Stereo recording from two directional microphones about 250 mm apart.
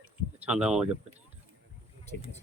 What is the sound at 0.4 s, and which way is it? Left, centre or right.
Speech, centre.